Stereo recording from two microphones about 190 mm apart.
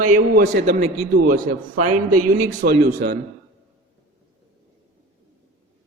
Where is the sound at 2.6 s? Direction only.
50° right (ahead or behind).